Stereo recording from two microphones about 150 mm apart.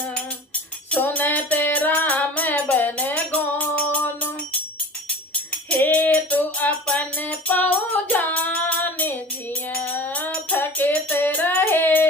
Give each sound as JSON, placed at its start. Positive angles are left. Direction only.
{"t": 0.9, "sound": "music", "side_deg": 10}
{"t": 5.6, "sound": "music", "side_deg": 10}